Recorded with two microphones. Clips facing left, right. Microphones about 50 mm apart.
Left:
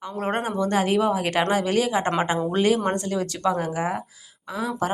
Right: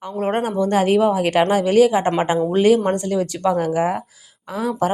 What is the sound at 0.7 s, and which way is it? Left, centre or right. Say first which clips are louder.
A woman's voice: right 5 dB; right.